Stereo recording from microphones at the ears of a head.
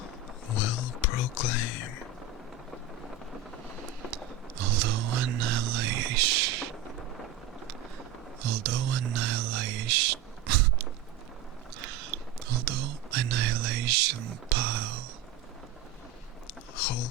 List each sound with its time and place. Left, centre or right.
0.5 s whispering: left
4.1 s whispering: right
8.4 s whispering: right
16.7 s vehicle: left